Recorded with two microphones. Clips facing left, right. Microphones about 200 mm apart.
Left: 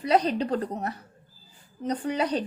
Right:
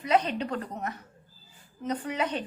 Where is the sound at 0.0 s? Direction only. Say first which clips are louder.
Left 3 dB; 35° left (ahead or behind).